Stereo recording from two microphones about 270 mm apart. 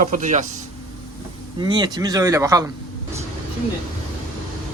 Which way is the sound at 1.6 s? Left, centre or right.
Centre.